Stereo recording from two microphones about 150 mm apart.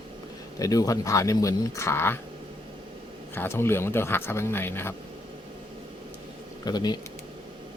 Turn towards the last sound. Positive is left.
turn(degrees=25)  # may be behind; listen again after turning